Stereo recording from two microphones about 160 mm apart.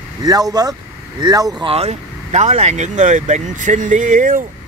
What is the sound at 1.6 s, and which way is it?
Speech, 40° right (ahead or behind).